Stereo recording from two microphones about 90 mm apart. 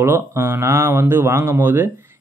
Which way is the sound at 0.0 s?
30° right (ahead or behind).